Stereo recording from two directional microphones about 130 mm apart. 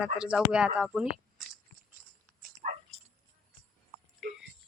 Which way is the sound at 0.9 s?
5° right (ahead or behind).